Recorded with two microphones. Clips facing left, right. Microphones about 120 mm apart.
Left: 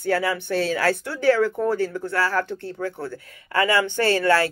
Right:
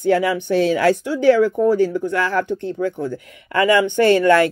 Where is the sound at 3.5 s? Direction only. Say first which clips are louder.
Right 5 dB; 35° left (ahead or behind).